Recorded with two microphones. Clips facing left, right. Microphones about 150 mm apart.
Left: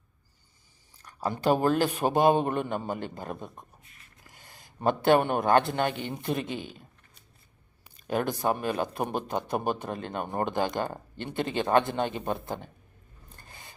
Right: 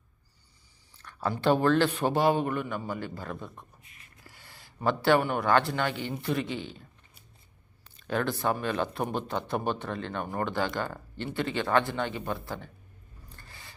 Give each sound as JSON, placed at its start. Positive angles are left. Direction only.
{"t": 1.3, "sound": "a man's voice", "side_deg": 15}
{"t": 7.9, "sound": "a man's voice", "side_deg": 15}
{"t": 13.3, "sound": "a sound", "side_deg": 20}